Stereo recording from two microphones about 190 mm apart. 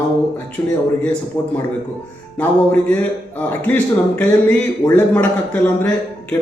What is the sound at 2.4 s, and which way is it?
A man's voice, 10° left (ahead or behind).